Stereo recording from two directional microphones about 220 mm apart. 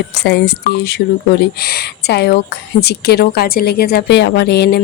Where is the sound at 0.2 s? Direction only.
50° left (ahead or behind).